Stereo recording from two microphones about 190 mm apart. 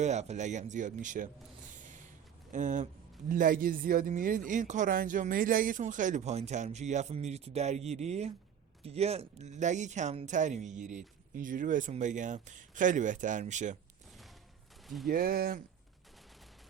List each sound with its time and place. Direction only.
0.0 s a man's voice: 35° right (ahead or behind)
2.5 s a man's voice: 40° right (ahead or behind)
15.0 s speech: 50° right (ahead or behind)